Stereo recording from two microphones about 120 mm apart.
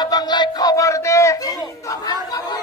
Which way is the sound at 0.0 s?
35° left (ahead or behind).